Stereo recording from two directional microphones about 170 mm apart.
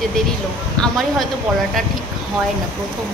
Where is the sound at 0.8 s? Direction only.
Centre (ahead or behind).